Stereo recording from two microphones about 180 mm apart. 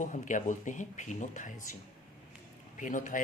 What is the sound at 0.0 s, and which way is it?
Speech, 45° left (ahead or behind).